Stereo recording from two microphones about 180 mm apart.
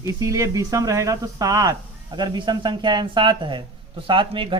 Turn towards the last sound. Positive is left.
turn(degrees=-25)  # may be behind; listen again after turning